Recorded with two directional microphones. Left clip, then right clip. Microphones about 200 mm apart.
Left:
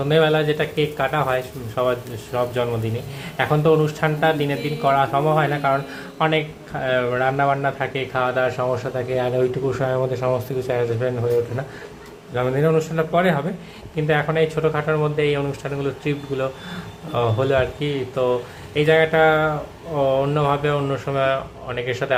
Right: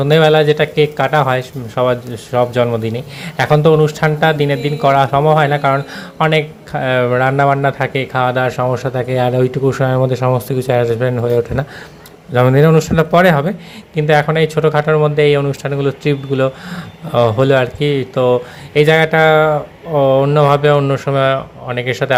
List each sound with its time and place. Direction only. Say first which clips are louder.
0.0 s speech: right 7 dB; 40° right (ahead or behind)